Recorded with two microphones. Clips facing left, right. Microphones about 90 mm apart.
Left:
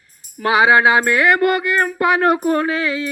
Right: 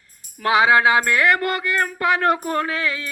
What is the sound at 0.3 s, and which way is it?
Music, 20° left (ahead or behind).